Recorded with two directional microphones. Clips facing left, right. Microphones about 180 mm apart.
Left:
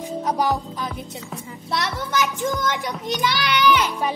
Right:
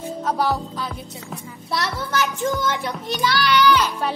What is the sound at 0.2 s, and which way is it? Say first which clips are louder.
Music: even; 15° left (ahead or behind).